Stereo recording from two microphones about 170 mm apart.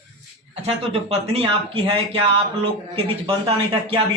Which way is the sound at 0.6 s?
35° right (ahead or behind).